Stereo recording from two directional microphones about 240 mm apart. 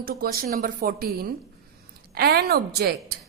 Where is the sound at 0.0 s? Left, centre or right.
Right.